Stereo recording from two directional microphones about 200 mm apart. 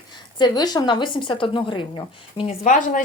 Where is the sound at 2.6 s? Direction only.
40° left (ahead or behind).